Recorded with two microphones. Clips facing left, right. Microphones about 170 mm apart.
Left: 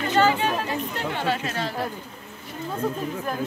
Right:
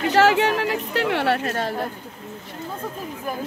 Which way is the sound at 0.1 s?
90° right.